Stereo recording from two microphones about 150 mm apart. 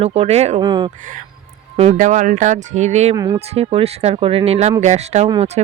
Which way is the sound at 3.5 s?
45° right (ahead or behind).